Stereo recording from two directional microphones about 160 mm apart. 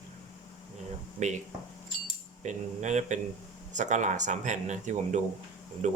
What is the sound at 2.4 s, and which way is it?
Speech, 50° right (ahead or behind).